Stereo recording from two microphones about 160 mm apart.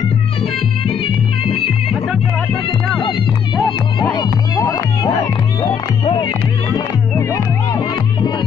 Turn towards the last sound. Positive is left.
turn(degrees=25)  # may be behind; listen again after turning